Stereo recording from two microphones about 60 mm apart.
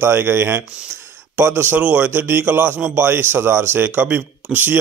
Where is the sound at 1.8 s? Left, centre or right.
Right.